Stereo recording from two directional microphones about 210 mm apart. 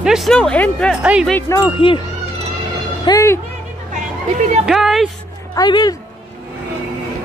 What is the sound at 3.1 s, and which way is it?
Speech, 15° left (ahead or behind).